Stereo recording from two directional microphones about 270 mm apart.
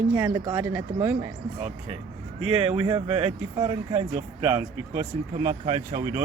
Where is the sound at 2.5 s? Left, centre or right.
Right.